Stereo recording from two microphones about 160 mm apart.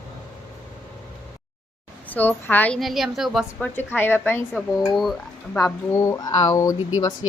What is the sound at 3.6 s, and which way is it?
Speech, 10° left (ahead or behind).